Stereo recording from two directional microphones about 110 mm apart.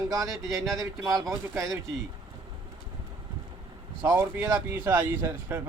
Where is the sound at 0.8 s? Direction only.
35° right (ahead or behind).